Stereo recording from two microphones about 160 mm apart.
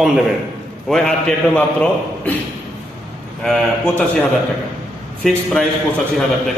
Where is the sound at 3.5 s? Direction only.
5° left (ahead or behind).